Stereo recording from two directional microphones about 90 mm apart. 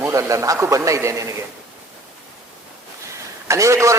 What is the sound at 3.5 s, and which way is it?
Speech, 35° right (ahead or behind).